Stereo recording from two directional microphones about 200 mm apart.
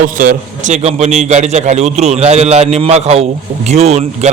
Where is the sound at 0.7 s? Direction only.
35° right (ahead or behind).